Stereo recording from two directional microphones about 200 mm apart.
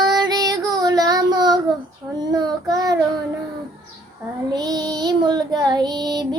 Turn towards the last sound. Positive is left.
turn(degrees=-20)  # may be behind; listen again after turning